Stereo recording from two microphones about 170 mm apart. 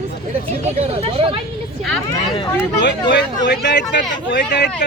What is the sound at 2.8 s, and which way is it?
Speech, 85° left.